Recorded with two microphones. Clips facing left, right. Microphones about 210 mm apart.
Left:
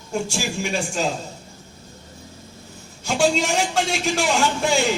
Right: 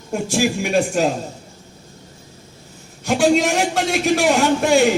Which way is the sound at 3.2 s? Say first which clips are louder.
Right 4 dB; 55° right (ahead or behind).